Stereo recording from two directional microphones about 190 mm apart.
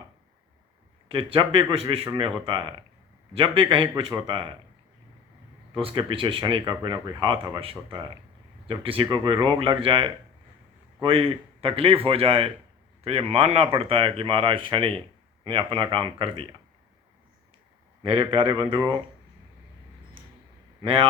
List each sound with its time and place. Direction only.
1.0 s speech: 30° right (ahead or behind)
5.7 s speech: 25° right (ahead or behind)
18.0 s speech: 25° right (ahead or behind)
20.8 s speech: 30° right (ahead or behind)